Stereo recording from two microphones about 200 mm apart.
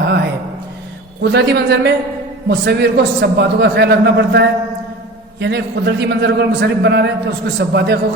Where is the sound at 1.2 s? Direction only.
55° right (ahead or behind).